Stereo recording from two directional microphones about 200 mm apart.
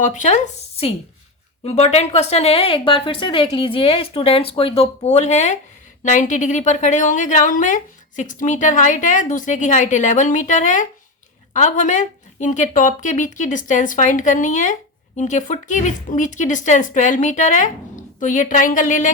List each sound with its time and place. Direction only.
0.0 s speech: 40° left (ahead or behind)